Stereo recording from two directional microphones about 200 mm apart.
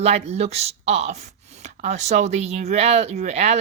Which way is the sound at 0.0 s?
35° right (ahead or behind).